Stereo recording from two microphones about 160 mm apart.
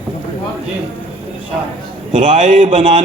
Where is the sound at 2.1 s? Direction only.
55° right (ahead or behind).